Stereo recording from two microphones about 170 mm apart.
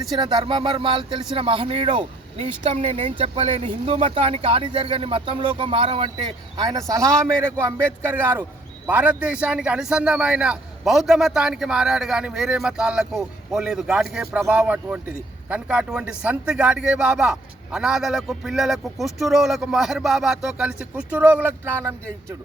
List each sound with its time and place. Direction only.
0.1 s speech: 25° right (ahead or behind)
8.9 s a man's voice: 10° right (ahead or behind)